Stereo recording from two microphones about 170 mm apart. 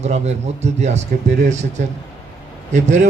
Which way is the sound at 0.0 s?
40° right (ahead or behind).